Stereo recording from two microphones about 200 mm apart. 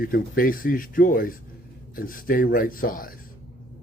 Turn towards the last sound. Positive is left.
turn(degrees=45)  # may be behind; listen again after turning